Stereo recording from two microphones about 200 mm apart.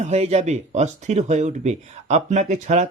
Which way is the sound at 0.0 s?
35° right (ahead or behind).